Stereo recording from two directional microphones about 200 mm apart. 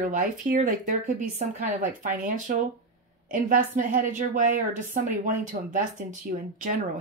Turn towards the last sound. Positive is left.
turn(degrees=-40)  # may be behind; listen again after turning